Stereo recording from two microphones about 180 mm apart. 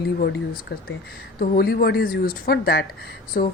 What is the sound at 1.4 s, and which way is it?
Speech, 55° left (ahead or behind).